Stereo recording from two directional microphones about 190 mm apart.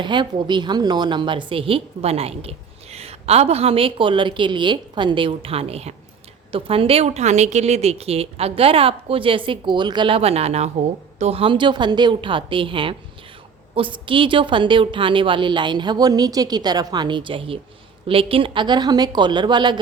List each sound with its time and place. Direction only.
0.0 s a woman's voice: 25° right (ahead or behind)